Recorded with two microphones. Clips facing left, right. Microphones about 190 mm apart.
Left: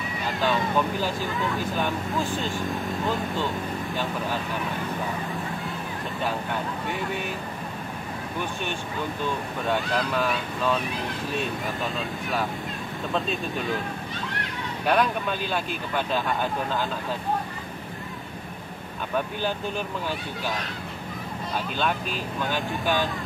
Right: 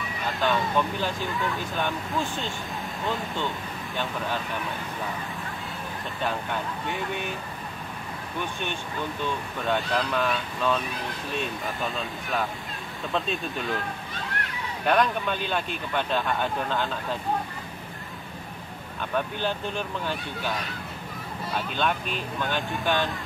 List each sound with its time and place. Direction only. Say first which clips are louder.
0.3 s speech: even; centre (ahead or behind)
9.7 s speech: even; 5° left (ahead or behind)
14.9 s speech: even; 5° left (ahead or behind)
21.5 s speech: even; centre (ahead or behind)